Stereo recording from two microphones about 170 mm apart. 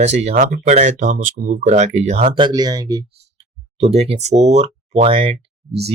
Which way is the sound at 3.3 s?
35° right (ahead or behind).